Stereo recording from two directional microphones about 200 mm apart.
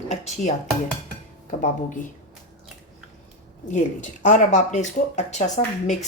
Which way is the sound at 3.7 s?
40° left (ahead or behind).